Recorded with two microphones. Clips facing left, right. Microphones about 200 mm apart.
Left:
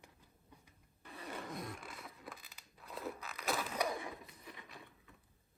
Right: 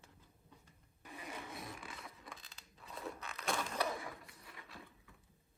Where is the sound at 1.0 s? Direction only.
10° right (ahead or behind); by 4.7 s 20° left (ahead or behind).